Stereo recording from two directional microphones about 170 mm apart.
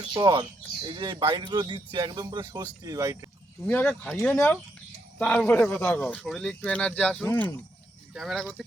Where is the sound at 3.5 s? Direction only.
5° left (ahead or behind).